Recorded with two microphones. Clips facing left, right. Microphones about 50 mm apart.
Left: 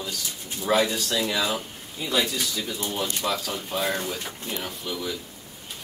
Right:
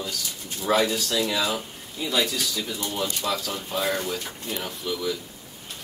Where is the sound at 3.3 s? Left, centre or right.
Centre.